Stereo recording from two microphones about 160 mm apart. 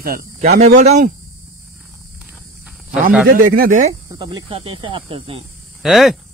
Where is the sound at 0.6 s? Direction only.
45° right (ahead or behind).